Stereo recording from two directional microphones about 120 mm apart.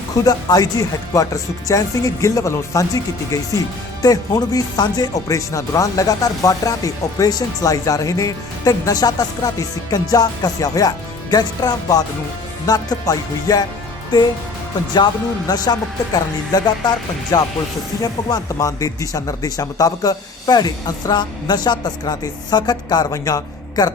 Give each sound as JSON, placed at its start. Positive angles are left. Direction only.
{"t": 0.3, "sound": "speech", "side_deg": 30}
{"t": 4.0, "sound": "speech", "side_deg": 30}